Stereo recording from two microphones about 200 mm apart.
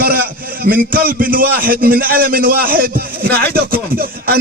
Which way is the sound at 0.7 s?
45° right (ahead or behind).